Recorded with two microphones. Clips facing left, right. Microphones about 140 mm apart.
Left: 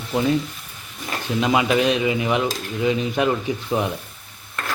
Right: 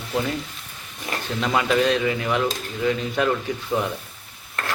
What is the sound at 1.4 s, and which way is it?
A man's voice, 15° left (ahead or behind).